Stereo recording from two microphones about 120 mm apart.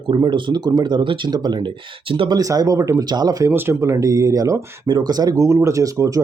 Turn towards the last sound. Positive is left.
turn(degrees=-30)  # may be behind; listen again after turning